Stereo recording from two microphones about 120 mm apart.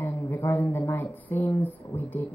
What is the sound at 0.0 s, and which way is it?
Speech, 15° left (ahead or behind).